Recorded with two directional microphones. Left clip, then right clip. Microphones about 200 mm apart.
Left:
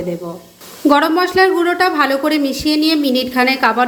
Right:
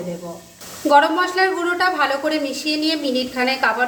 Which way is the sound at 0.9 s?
35° left (ahead or behind).